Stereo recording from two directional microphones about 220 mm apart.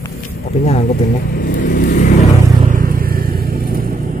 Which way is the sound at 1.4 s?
40° left (ahead or behind).